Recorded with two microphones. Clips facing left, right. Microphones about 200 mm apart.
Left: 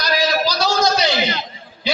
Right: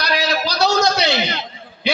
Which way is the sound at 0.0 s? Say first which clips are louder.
Left 2 dB; 65° right (ahead or behind).